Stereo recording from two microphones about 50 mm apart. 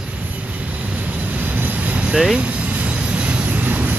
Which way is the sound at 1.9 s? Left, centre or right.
Right.